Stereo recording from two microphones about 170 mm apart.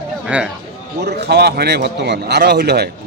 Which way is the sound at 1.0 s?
75° right (ahead or behind).